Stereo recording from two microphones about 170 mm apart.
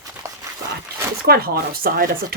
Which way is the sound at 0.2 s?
20° right (ahead or behind).